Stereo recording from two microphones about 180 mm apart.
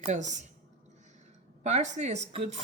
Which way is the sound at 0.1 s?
40° right (ahead or behind).